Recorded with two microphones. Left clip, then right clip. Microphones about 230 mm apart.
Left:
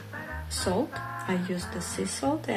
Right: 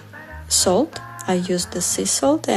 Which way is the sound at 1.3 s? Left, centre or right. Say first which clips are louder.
Right 14 dB; right.